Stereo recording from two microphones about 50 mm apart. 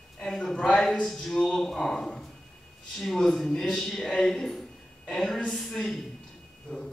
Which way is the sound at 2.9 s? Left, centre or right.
Centre.